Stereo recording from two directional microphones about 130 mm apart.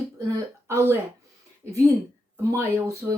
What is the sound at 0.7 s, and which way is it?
A woman's voice, 20° right (ahead or behind).